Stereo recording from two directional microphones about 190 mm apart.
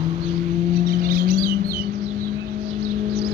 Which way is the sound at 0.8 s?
50° right (ahead or behind).